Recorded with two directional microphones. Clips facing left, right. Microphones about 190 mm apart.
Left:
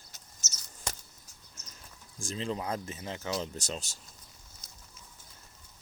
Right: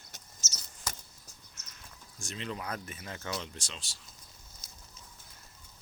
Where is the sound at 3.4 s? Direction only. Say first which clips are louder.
Left 6 dB; 40° left (ahead or behind).